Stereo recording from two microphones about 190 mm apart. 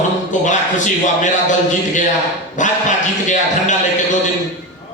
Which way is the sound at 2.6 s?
40° left (ahead or behind).